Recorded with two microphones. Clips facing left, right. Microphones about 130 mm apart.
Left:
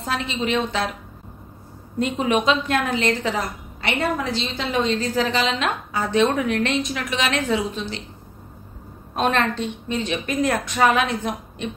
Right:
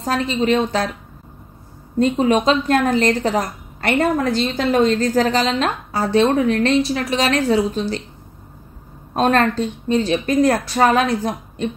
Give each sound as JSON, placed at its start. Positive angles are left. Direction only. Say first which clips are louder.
{"t": 0.0, "sound": "a woman's voice", "louder": "right 6 dB", "side_deg": -40}
{"t": 2.0, "sound": "a woman's voice", "louder": "right 5 dB", "side_deg": -35}
{"t": 9.1, "sound": "a woman's voice", "louder": "right 5 dB", "side_deg": -40}